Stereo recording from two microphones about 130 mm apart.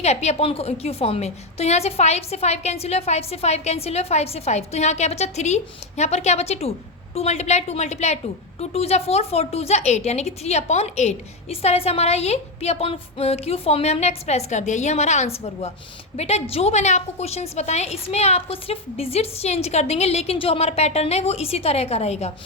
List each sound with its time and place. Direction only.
0.0 s a woman's voice: 55° left (ahead or behind)